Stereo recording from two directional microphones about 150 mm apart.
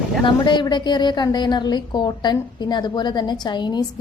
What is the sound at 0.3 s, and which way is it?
A woman's voice, 30° left (ahead or behind).